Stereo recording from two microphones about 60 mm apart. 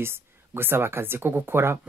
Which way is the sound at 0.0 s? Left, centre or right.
Right.